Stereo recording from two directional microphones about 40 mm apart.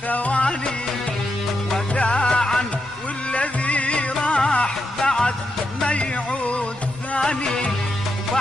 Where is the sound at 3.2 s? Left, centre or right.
Left.